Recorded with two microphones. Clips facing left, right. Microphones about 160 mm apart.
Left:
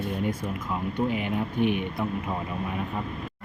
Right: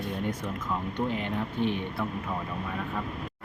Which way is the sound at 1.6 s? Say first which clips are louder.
Left 4 dB; 15° left (ahead or behind).